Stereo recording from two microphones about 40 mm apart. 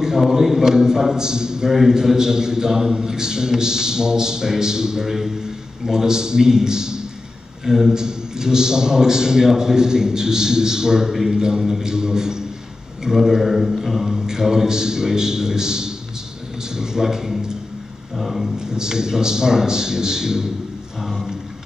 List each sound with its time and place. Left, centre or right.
0.0 s a man's voice: centre
13.0 s mantra: centre
14.2 s a man's voice: centre
18.1 s mantra: centre
18.6 s a man's voice: centre